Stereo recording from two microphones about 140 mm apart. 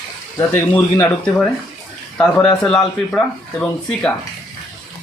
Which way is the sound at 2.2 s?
5° left (ahead or behind).